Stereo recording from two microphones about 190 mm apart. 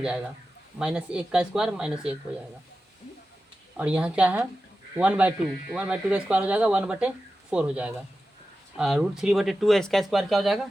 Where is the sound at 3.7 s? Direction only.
5° right (ahead or behind).